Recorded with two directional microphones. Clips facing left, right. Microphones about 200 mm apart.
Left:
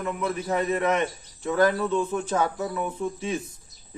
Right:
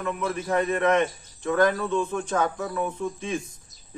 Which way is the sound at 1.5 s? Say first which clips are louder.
Even; 5° left (ahead or behind).